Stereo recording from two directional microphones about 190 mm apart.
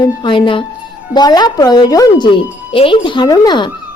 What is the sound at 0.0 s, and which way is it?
Speech, 25° left (ahead or behind).